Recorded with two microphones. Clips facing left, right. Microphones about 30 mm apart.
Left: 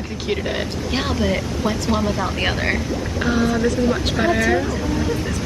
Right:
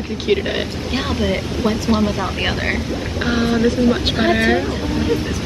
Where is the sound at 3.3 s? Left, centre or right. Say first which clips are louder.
Right 2 dB; right.